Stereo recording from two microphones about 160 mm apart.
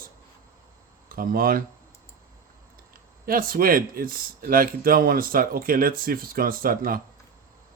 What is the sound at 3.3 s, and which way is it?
Speech, 65° right (ahead or behind).